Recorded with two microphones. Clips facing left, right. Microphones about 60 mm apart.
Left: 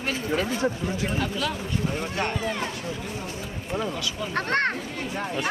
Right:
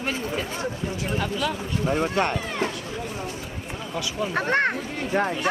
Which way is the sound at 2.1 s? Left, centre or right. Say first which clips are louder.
Right 4 dB; right.